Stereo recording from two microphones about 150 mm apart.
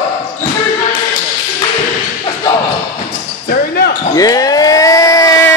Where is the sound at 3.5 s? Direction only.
90° left.